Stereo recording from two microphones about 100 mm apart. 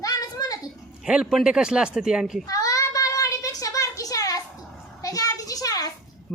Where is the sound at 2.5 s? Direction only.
35° left (ahead or behind).